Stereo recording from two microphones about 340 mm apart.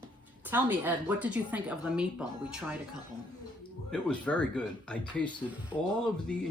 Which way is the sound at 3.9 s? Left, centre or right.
Centre.